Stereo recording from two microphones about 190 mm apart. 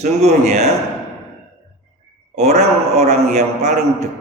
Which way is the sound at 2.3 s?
35° right (ahead or behind).